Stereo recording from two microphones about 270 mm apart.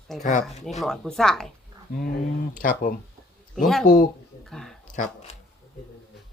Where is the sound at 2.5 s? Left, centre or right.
Left.